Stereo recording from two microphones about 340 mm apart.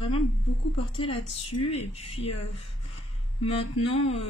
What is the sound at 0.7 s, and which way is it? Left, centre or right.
Speech, centre.